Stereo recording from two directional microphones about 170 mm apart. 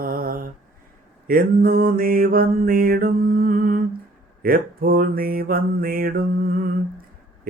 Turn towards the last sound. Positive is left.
turn(degrees=-55)  # may be behind; listen again after turning